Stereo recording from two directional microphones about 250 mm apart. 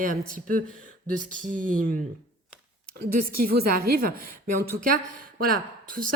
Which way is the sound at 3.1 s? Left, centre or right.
Right.